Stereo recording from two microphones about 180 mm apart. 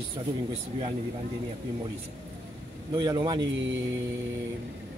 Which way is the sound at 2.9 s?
25° right (ahead or behind).